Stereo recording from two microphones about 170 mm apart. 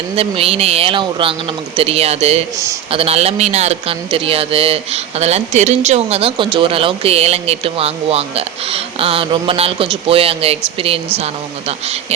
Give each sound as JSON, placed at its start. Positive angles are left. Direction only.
{"t": 0.2, "sound": "speech", "side_deg": -35}